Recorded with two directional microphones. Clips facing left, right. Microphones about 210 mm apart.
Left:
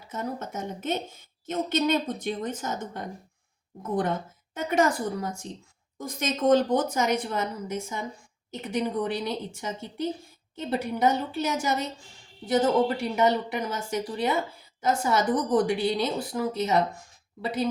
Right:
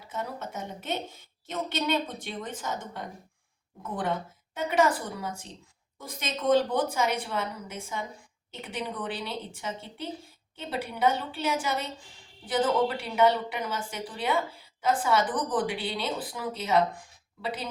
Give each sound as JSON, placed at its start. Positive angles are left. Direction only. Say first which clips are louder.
{"t": 0.1, "sound": "speech", "louder": "left 3 dB", "side_deg": 45}
{"t": 4.5, "sound": "speech", "louder": "left 1 dB", "side_deg": 45}